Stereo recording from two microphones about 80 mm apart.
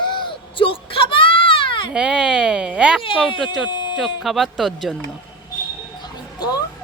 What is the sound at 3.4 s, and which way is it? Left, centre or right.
Speech, centre.